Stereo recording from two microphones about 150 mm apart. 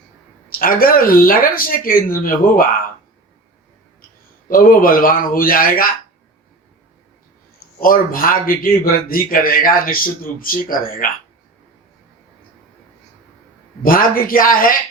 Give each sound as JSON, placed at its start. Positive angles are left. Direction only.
{"t": 0.6, "sound": "a man's voice", "side_deg": 75}
{"t": 4.4, "sound": "a man's voice", "side_deg": 70}
{"t": 7.8, "sound": "a man's voice", "side_deg": 70}
{"t": 13.8, "sound": "a man's voice", "side_deg": 75}